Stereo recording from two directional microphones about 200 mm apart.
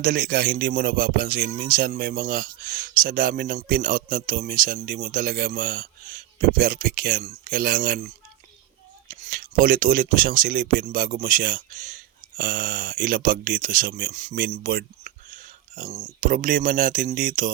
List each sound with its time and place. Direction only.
0.0 s speech: 45° right (ahead or behind)